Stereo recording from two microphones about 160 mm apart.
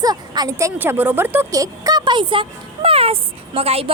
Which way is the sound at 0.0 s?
25° right (ahead or behind).